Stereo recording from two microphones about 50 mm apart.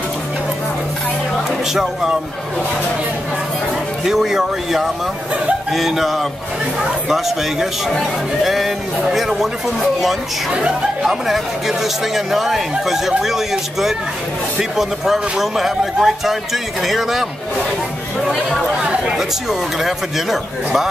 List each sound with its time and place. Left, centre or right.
1.7 s a man's voice: centre
4.0 s a man's voice: centre
10.5 s speech: right
11.1 s a man's voice: centre
18.2 s speech: centre
19.8 s speech: centre